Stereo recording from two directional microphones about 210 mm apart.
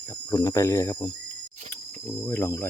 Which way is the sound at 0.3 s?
15° left (ahead or behind).